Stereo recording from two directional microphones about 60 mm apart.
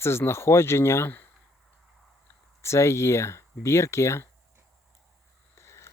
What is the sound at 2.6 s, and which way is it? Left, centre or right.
Speech, left.